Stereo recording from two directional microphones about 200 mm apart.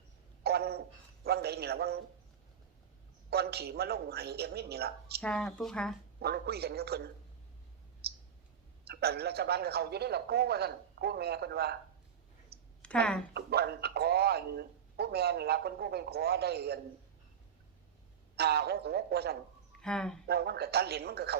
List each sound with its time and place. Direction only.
0.4 s a sound: 55° right (ahead or behind)
3.2 s a man's voice: 55° right (ahead or behind)
5.2 s speech: 5° left (ahead or behind)
6.1 s a man's voice: 55° right (ahead or behind)
8.0 s clicking: 55° right (ahead or behind)
8.9 s a man's voice: 55° right (ahead or behind)
12.8 s speech: 5° left (ahead or behind)
13.3 s a man's voice: 55° right (ahead or behind)
18.3 s a man's voice: 55° right (ahead or behind)
19.8 s speech: 5° left (ahead or behind)
20.2 s a man's voice: 55° right (ahead or behind)